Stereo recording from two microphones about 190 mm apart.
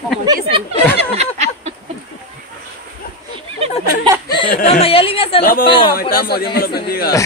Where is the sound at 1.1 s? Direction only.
35° right (ahead or behind).